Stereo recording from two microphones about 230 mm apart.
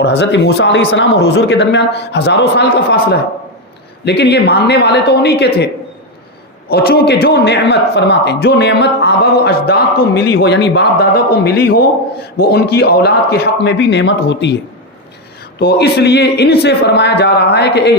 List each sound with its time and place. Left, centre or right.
0.0 s a man's voice: left
6.7 s a man's voice: left
15.5 s a man's voice: left